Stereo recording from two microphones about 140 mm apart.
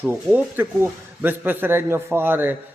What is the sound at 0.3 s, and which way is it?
A man's voice, 10° right (ahead or behind).